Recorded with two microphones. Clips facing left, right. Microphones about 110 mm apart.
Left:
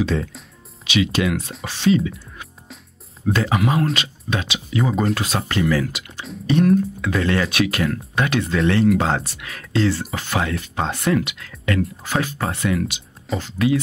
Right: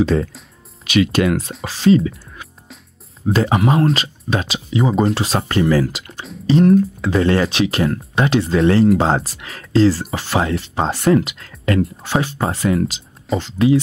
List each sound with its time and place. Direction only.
0.0 s speech: 45° right (ahead or behind)
1.6 s speech: 40° right (ahead or behind)
3.3 s speech: 30° right (ahead or behind)
4.6 s speech: 20° right (ahead or behind)